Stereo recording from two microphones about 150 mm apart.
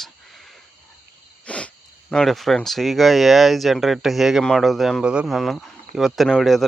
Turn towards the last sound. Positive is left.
turn(degrees=0)  # may be behind; listen again after turning